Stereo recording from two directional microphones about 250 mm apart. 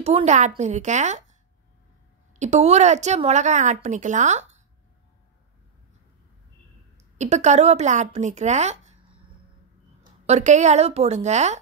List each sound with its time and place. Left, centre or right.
0.0 s a woman's voice: right
2.3 s a woman's voice: right
7.2 s a woman's voice: right
10.0 s a woman's voice: right